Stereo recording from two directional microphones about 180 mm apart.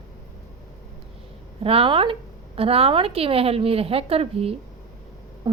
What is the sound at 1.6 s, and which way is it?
A woman's voice, 30° right (ahead or behind).